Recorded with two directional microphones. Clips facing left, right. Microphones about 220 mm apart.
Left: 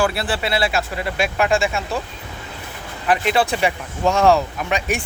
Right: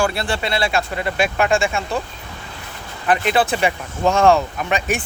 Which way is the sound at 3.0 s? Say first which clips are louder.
Right 1 dB; centre (ahead or behind).